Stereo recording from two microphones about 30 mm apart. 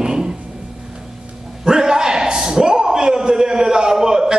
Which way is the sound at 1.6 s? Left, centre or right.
Right.